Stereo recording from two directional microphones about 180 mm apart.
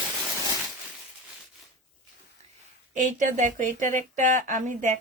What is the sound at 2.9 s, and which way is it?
Speech, 45° right (ahead or behind).